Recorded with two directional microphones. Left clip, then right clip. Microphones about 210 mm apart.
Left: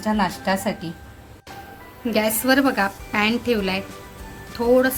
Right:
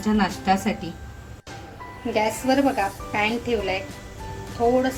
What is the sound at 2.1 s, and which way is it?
A woman's voice, 50° left (ahead or behind).